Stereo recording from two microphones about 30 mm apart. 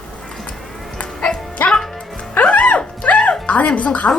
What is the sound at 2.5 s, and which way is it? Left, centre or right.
Music, left.